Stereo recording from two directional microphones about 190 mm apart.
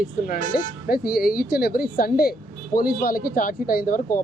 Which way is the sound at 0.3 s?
50° left (ahead or behind).